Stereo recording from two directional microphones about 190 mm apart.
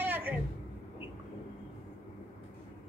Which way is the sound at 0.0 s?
10° right (ahead or behind).